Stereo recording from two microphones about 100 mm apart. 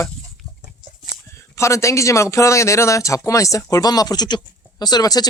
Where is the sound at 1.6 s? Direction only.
30° left (ahead or behind).